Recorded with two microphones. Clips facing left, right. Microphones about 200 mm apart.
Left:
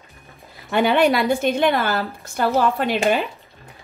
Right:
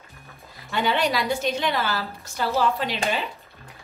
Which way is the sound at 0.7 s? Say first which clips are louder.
Left 7 dB; 55° left (ahead or behind).